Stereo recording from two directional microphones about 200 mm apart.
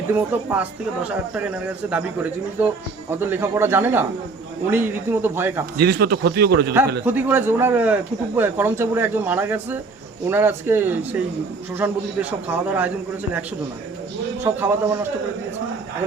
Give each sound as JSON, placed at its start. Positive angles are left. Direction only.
{"t": 0.1, "sound": "speech", "side_deg": -10}
{"t": 5.8, "sound": "speech", "side_deg": -55}
{"t": 7.0, "sound": "speech", "side_deg": -10}
{"t": 14.5, "sound": "a man's voice", "side_deg": -20}